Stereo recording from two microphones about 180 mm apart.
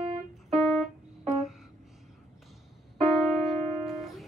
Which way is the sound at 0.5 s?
Centre (ahead or behind).